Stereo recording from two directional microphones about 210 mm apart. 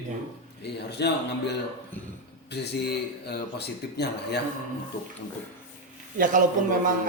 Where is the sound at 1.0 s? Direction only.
55° left (ahead or behind).